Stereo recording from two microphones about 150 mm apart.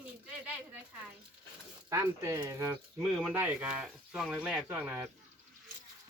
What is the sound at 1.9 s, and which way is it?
Speech, 20° right (ahead or behind).